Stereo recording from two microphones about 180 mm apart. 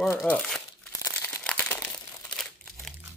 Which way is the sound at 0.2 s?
5° left (ahead or behind).